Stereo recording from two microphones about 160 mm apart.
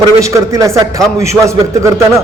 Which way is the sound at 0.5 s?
20° right (ahead or behind).